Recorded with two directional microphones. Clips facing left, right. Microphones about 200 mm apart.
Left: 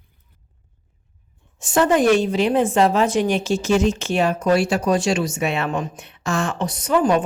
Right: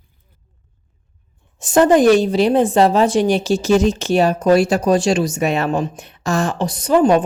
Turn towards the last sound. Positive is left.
turn(degrees=-30)  # may be behind; listen again after turning